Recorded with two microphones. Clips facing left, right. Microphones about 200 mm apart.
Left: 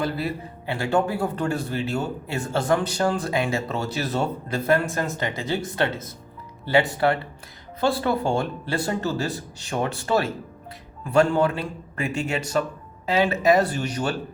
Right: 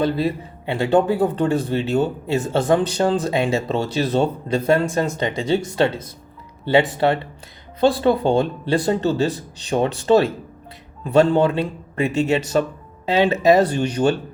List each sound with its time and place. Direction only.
0.0 s speech: 25° right (ahead or behind)